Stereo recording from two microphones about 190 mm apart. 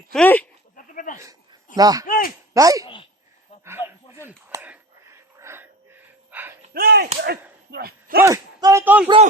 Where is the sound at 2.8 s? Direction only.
30° left (ahead or behind).